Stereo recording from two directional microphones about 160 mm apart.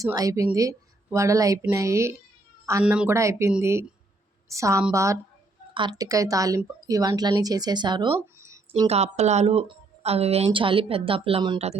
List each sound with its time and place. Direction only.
0.0 s speech: 20° right (ahead or behind)
2.8 s a woman's voice: 5° right (ahead or behind)
3.2 s a woman's voice: 20° right (ahead or behind)
8.1 s a sound: 15° right (ahead or behind)
8.9 s speech: 45° right (ahead or behind)